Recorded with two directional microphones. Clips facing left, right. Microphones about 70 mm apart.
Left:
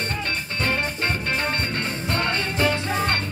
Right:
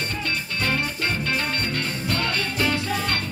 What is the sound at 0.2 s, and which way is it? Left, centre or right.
Music, left.